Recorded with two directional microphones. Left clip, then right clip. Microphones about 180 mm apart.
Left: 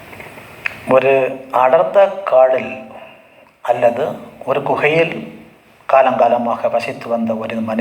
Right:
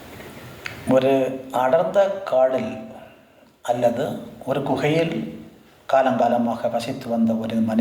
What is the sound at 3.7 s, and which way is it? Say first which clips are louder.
A man's voice: left 6 dB; 15° left (ahead or behind).